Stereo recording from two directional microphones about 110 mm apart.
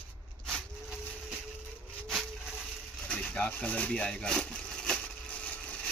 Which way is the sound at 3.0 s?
10° left (ahead or behind).